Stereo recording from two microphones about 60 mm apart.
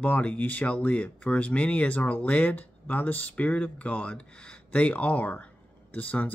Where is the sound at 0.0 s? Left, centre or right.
Left.